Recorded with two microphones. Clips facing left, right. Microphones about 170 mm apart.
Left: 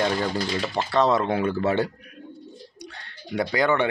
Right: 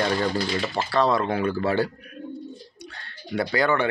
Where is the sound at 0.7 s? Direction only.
20° left (ahead or behind).